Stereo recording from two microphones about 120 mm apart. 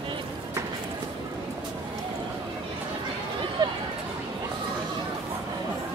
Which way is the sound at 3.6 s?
35° right (ahead or behind).